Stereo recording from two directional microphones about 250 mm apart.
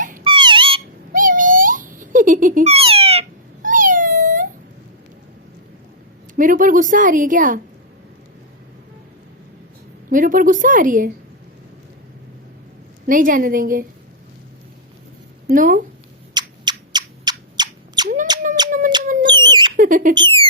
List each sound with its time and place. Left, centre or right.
0.3 s dog: centre
1.1 s cat: right
6.3 s a woman's voice: right
10.1 s a woman's voice: right
13.1 s a woman's voice: right
15.4 s a woman's voice: right
16.3 s a sound: centre
19.7 s a sound: right
20.1 s rodents: centre